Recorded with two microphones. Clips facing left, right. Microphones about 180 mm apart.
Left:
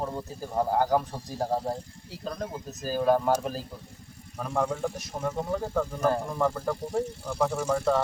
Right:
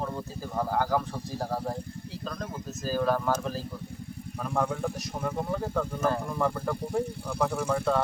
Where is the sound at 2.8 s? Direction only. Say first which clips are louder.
Left 3 dB; 15° left (ahead or behind).